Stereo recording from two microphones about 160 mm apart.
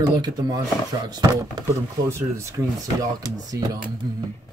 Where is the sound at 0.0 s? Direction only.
25° right (ahead or behind).